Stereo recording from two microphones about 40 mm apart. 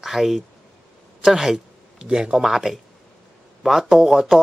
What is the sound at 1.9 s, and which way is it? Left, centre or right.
Speech, right.